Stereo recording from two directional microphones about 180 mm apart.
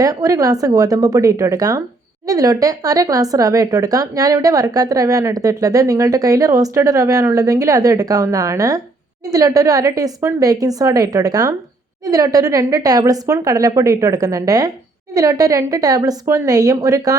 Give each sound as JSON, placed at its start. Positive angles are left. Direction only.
{"t": 0.0, "sound": "speech", "side_deg": -20}